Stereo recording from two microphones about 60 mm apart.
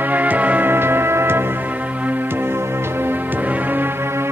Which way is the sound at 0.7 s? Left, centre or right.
Right.